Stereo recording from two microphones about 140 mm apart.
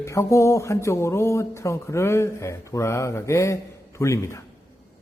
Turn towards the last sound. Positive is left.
turn(degrees=20)  # may be behind; listen again after turning